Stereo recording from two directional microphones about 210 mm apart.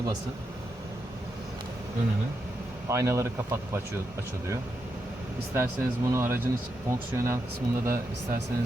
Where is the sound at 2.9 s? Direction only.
15° right (ahead or behind).